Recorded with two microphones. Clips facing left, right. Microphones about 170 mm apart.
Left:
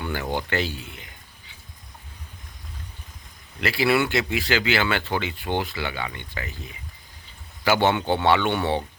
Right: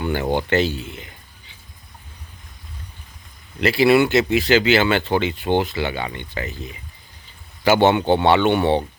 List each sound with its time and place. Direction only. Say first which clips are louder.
0.0 s speech: right 6 dB; 25° right (ahead or behind)
3.6 s speech: right 7 dB; 20° right (ahead or behind)
7.6 s speech: right 5 dB; 20° right (ahead or behind)